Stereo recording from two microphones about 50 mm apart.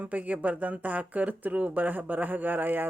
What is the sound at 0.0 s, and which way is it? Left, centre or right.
Speech, right.